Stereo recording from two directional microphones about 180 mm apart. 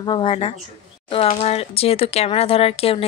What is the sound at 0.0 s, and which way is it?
A woman's voice, 30° left (ahead or behind).